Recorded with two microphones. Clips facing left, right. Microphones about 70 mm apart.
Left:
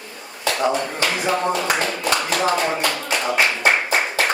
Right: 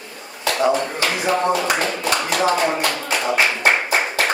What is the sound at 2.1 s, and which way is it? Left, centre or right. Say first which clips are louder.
Clapping: right 2 dB; centre.